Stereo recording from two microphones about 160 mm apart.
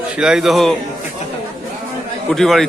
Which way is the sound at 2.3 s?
Centre (ahead or behind).